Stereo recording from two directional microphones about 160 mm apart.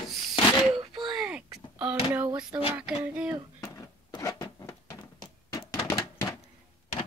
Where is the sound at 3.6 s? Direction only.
20° left (ahead or behind).